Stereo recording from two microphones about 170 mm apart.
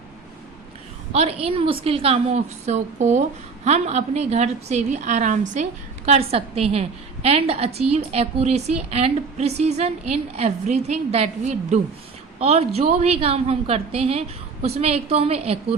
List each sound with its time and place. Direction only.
1.1 s a woman's voice: 35° right (ahead or behind)
6.1 s a woman's voice: 35° right (ahead or behind)